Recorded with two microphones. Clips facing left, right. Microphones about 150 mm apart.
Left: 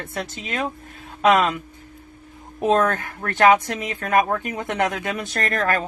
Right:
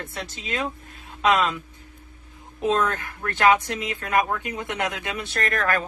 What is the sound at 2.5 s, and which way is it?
Speech, 55° left (ahead or behind).